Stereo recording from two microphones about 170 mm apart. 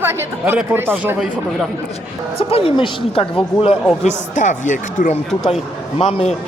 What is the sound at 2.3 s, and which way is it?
Speech, 35° left (ahead or behind).